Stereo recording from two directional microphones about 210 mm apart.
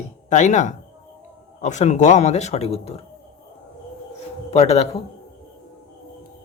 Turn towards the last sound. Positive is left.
turn(degrees=30)  # may be behind; listen again after turning